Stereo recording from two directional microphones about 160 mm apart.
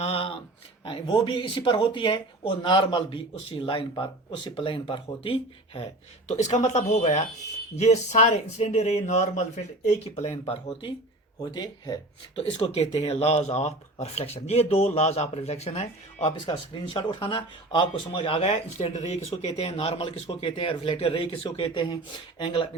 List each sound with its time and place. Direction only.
0.0 s a sound: 35° left (ahead or behind)
1.1 s speech: 30° left (ahead or behind)
11.5 s speech: 25° left (ahead or behind)
12.4 s speech: 40° left (ahead or behind)
16.5 s speech: 25° left (ahead or behind)